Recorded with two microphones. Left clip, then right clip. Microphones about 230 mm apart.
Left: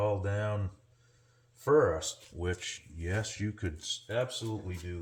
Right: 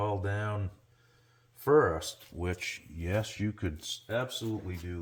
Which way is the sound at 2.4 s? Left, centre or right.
Right.